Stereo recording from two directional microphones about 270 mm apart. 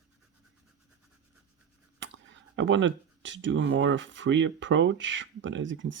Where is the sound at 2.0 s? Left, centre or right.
Right.